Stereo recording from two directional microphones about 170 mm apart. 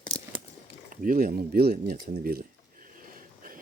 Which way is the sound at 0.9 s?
55° right (ahead or behind).